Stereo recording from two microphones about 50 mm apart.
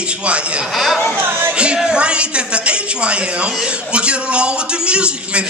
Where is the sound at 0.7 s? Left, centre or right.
Centre.